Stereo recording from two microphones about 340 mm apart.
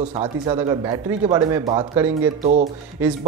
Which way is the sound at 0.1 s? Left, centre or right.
Centre.